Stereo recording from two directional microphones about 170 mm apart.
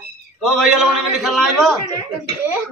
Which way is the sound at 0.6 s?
Centre (ahead or behind).